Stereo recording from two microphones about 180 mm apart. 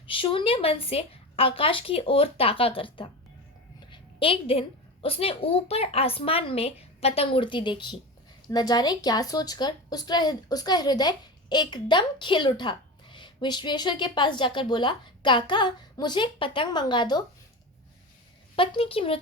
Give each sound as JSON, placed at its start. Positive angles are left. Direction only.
{"t": 0.0, "sound": "a woman's voice", "side_deg": 30}
{"t": 3.8, "sound": "a sound", "side_deg": 25}
{"t": 5.0, "sound": "a woman's voice", "side_deg": 30}
{"t": 18.5, "sound": "a woman's voice", "side_deg": 30}